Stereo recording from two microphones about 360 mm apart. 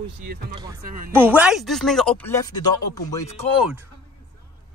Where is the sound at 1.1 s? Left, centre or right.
Centre.